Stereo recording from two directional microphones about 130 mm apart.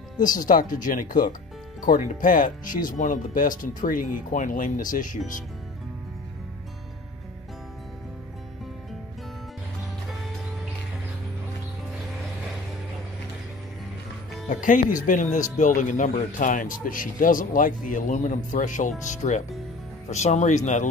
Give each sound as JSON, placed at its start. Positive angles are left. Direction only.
{"t": 0.2, "sound": "speech", "side_deg": 90}
{"t": 14.5, "sound": "speech", "side_deg": 80}